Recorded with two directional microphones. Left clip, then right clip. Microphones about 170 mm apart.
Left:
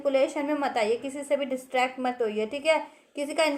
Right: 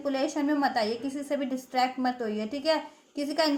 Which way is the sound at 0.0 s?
25° left (ahead or behind).